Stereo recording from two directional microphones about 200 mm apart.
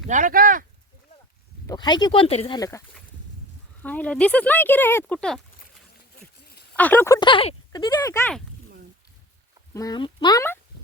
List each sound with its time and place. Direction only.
0.1 s speech: 40° right (ahead or behind)
1.6 s speech: 20° left (ahead or behind)
2.6 s speech: 15° left (ahead or behind)
3.8 s speech: 5° left (ahead or behind)
6.7 s speech: 10° left (ahead or behind)
9.7 s speech: 20° left (ahead or behind)